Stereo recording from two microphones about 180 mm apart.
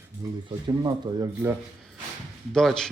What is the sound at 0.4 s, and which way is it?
Speech, 25° right (ahead or behind).